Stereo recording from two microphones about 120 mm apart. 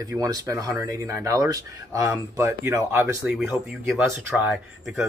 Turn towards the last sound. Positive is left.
turn(degrees=0)  # may be behind; listen again after turning